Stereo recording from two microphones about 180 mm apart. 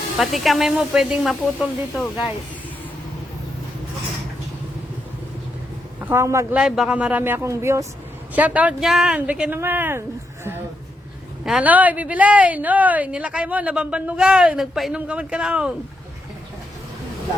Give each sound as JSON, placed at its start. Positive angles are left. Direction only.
{"t": 0.2, "sound": "speech", "side_deg": 0}
{"t": 6.0, "sound": "a man's voice", "side_deg": -15}
{"t": 6.6, "sound": "speech", "side_deg": -5}
{"t": 11.4, "sound": "speech", "side_deg": -5}